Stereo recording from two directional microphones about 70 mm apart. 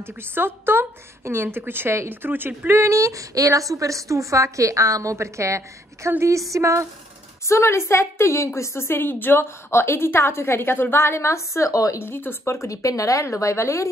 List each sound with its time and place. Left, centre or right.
0.2 s a woman's voice: right
2.8 s a woman's voice: right
7.4 s a woman's voice: left
12.0 s speech: left